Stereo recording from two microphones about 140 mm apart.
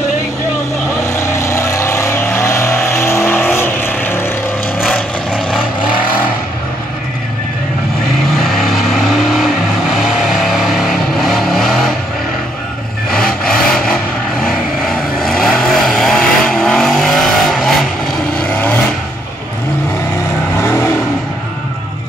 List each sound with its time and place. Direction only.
1.0 s vehicle: 20° left (ahead or behind)
4.8 s vehicle: 5° left (ahead or behind)
8.4 s vehicle: centre (ahead or behind)
10.5 s vehicle: centre (ahead or behind)
13.1 s vehicle: 5° left (ahead or behind)
20.5 s vehicle: 20° left (ahead or behind)